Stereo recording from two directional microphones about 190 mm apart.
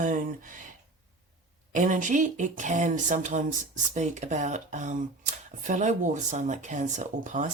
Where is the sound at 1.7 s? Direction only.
45° right (ahead or behind).